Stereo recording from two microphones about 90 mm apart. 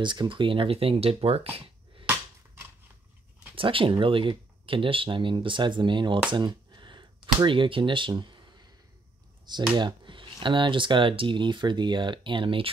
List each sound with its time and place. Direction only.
0.0 s speech: 60° right (ahead or behind); by 2.0 s 90° right
3.5 s speech: 75° right (ahead or behind)
6.3 s a sound: 55° right (ahead or behind)
7.3 s speech: 65° right (ahead or behind)
9.8 s speech: 60° right (ahead or behind); by 12.7 s 75° right (ahead or behind)